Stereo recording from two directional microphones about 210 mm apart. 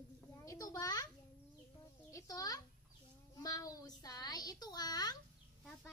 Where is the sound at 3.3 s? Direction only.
15° left (ahead or behind).